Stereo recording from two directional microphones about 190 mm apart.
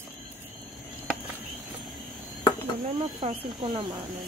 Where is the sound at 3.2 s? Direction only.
25° right (ahead or behind).